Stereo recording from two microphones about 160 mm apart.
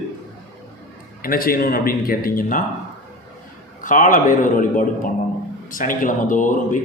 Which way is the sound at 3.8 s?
55° left (ahead or behind).